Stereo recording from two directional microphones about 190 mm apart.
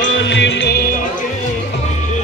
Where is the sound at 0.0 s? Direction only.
70° left (ahead or behind).